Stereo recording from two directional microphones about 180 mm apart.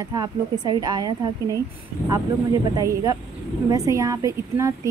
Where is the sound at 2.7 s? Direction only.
20° right (ahead or behind).